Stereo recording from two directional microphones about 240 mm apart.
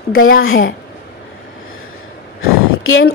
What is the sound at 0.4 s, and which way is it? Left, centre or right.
Speech, left.